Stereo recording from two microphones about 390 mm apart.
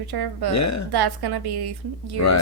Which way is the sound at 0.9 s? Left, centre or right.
Right.